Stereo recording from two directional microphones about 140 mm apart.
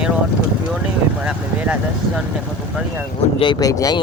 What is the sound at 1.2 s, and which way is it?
Speech, 10° right (ahead or behind).